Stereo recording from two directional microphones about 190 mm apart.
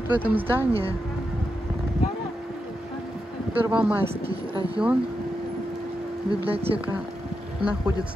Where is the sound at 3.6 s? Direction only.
10° right (ahead or behind).